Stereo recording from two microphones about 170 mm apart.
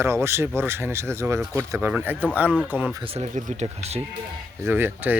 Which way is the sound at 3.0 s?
40° right (ahead or behind).